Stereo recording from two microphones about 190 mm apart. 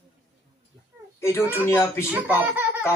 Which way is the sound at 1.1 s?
10° left (ahead or behind).